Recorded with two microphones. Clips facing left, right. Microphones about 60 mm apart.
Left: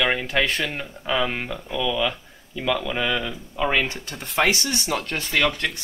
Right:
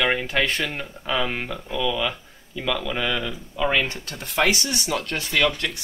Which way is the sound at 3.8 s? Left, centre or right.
Left.